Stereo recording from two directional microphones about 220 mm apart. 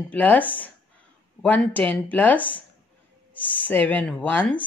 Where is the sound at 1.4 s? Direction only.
5° left (ahead or behind).